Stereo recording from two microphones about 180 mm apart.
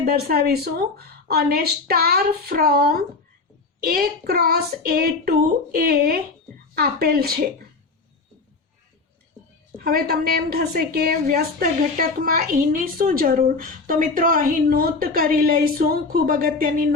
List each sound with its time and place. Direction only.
0.0 s speech: 60° right (ahead or behind)
9.7 s a woman's voice: 55° right (ahead or behind)